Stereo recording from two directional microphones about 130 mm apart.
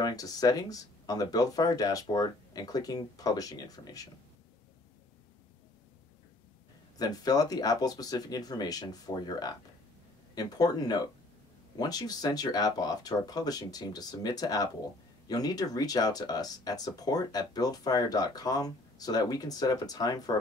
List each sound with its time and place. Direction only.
0.0 s speech: 30° left (ahead or behind)
7.0 s speech: 30° left (ahead or behind)